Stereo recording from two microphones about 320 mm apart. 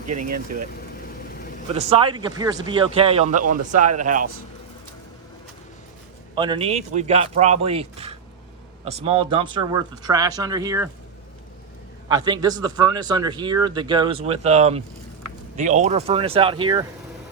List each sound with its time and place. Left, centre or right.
0.0 s speech: right
1.7 s a man's voice: centre
6.3 s a man's voice: centre
12.0 s a man's voice: centre